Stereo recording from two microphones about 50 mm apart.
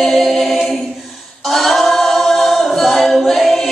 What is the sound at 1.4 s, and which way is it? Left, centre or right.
A capella, centre.